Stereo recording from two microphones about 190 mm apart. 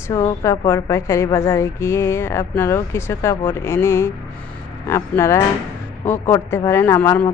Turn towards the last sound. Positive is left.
turn(degrees=10)  # may be behind; listen again after turning